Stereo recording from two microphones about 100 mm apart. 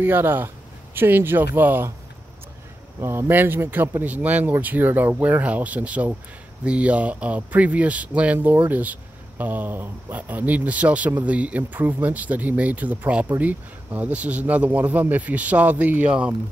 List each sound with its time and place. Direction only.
0.0 s speech: 20° right (ahead or behind)
3.0 s speech: 25° right (ahead or behind)